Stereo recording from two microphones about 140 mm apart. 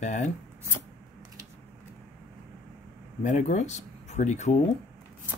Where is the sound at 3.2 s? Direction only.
60° left (ahead or behind).